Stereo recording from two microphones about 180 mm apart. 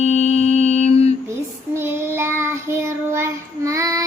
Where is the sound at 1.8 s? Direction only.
15° right (ahead or behind).